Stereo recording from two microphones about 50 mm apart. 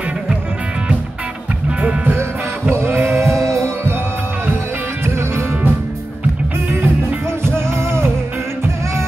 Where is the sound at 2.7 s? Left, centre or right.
Right.